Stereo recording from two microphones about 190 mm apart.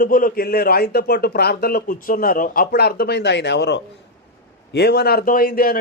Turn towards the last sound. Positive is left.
turn(degrees=50)  # may be behind; listen again after turning